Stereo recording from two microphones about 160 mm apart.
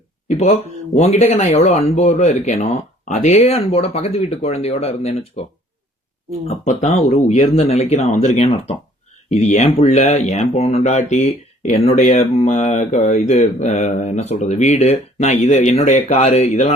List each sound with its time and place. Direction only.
0.3 s speech: 40° left (ahead or behind)